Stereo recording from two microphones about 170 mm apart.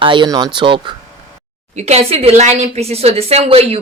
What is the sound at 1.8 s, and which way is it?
A woman's voice, 40° right (ahead or behind).